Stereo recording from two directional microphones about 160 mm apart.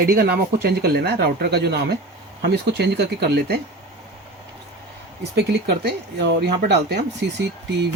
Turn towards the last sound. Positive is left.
turn(degrees=-90)